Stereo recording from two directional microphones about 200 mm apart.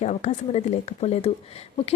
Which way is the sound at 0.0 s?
35° left (ahead or behind).